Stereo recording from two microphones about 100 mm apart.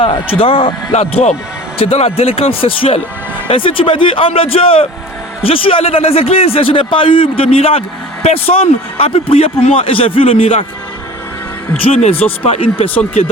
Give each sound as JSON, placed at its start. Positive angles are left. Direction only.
{"t": 0.0, "sound": "speech", "side_deg": 65}
{"t": 0.9, "sound": "speech", "side_deg": 90}
{"t": 1.8, "sound": "speech", "side_deg": 75}
{"t": 11.8, "sound": "speech", "side_deg": 80}
{"t": 12.4, "sound": "speech", "side_deg": 70}